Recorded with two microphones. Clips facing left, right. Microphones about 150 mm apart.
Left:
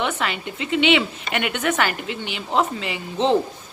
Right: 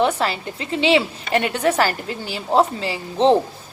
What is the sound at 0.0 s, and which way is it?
A woman's voice, 35° right (ahead or behind).